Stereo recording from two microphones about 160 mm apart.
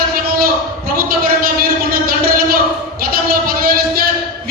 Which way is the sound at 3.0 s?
65° right (ahead or behind).